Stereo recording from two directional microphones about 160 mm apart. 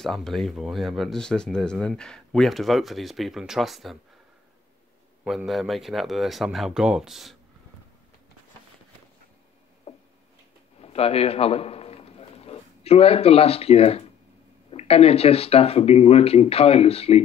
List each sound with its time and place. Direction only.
0.0 s speech: centre (ahead or behind)
5.2 s speech: centre (ahead or behind)
9.9 s a sound: 40° left (ahead or behind)
10.8 s a man's voice: 40° left (ahead or behind)